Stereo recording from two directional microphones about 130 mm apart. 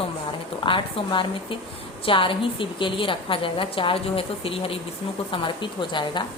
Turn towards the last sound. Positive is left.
turn(degrees=40)  # may be behind; listen again after turning